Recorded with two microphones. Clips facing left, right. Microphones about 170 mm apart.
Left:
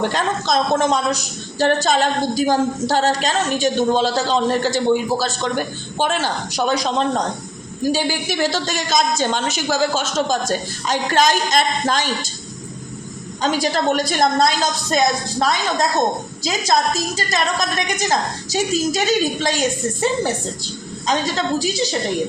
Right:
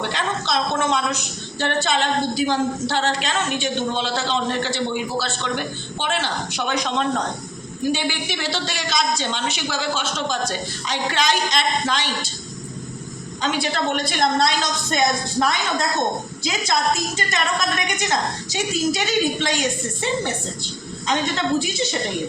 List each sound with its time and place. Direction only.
0.0 s a woman's voice: 45° left (ahead or behind)
7.9 s a woman's voice: 40° left (ahead or behind)
13.4 s a woman's voice: 40° left (ahead or behind)
21.1 s a woman's voice: 35° left (ahead or behind)